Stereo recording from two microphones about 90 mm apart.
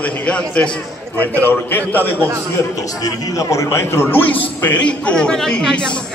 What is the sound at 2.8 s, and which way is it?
A man's voice, 45° left (ahead or behind).